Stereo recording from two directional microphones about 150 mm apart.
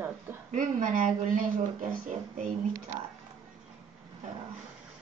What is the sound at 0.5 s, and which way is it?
Speech, 60° right (ahead or behind).